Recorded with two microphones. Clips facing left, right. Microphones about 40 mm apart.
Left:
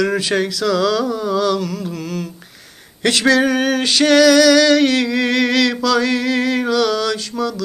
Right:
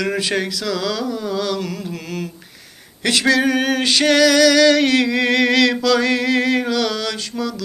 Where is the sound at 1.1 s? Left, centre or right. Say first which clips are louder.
Left 4 dB; centre.